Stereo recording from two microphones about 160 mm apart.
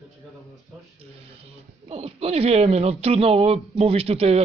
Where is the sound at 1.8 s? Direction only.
40° right (ahead or behind).